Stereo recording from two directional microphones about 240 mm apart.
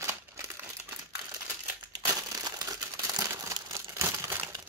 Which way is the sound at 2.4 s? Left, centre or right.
Centre.